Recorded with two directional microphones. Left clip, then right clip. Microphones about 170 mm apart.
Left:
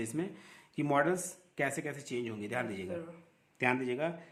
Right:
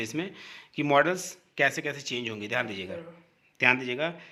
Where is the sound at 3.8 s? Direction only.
20° right (ahead or behind).